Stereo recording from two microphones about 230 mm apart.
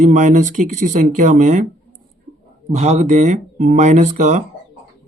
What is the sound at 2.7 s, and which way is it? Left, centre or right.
Speech, right.